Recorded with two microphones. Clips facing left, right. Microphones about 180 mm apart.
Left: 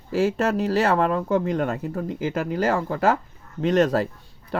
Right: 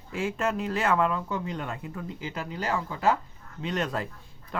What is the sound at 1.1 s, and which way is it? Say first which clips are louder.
Speech: left 9 dB; 50° left (ahead or behind).